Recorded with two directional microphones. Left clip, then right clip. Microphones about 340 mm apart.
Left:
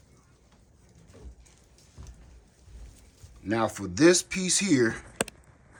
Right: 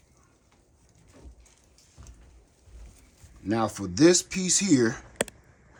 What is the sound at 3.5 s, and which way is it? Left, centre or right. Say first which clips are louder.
Speech: even; centre.